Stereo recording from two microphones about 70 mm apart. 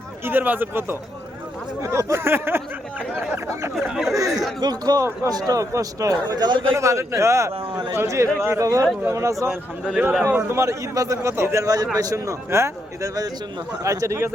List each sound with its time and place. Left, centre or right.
0.3 s speech: right
1.8 s speech: right
2.2 s speech: right
3.8 s speech: centre
4.1 s a man's voice: right
4.6 s speech: right
5.5 s a man's voice: right
6.7 s a man's voice: right
9.8 s speech: centre
10.3 s speech: right
10.9 s a man's voice: right
11.6 s a man's voice: right